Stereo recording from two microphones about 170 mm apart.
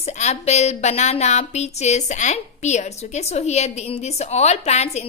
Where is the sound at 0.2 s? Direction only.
40° left (ahead or behind).